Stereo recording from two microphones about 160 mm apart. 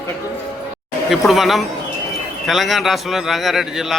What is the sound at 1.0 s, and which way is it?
A man's voice, centre (ahead or behind).